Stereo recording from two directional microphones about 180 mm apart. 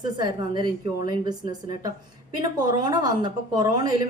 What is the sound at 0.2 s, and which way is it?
Speech, 25° right (ahead or behind).